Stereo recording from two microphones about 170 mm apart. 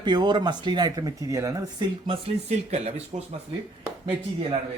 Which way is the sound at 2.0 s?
35° right (ahead or behind).